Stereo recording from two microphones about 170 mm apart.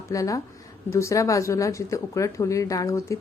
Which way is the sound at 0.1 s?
20° left (ahead or behind).